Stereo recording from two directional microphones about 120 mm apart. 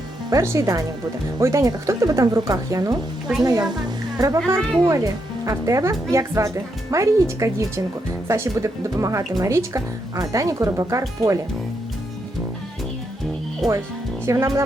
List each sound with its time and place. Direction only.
0.3 s a woman's voice: 25° right (ahead or behind)
13.6 s speech: centre (ahead or behind)
14.3 s speech: 25° right (ahead or behind)